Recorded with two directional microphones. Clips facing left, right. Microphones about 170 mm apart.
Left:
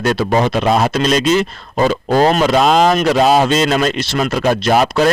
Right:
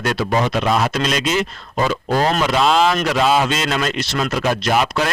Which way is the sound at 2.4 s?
40° left (ahead or behind).